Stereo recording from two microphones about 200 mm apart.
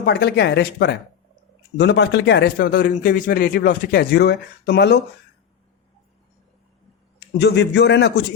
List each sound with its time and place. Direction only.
0.0 s a man's voice: 55° left (ahead or behind)
7.3 s speech: 55° left (ahead or behind)